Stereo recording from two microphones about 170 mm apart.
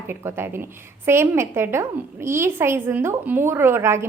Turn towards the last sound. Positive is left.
turn(degrees=-15)  # may be behind; listen again after turning